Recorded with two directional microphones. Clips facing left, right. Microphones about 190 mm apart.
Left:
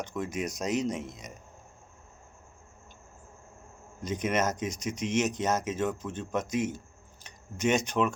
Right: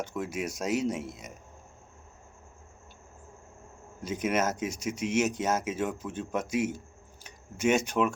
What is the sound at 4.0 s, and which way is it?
Speech, 5° right (ahead or behind).